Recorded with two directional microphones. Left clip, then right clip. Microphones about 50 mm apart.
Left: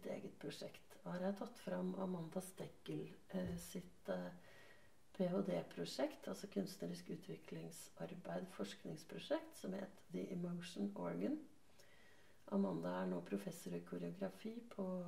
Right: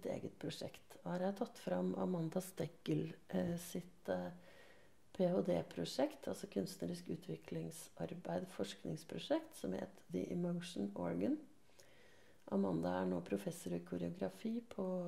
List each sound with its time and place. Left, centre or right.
0.0 s speech: right
12.4 s speech: right